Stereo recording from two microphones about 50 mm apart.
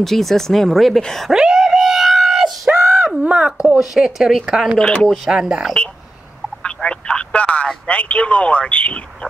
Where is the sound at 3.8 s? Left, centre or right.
Centre.